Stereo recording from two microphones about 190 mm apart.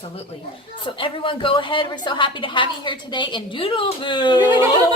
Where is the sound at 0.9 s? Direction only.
25° left (ahead or behind).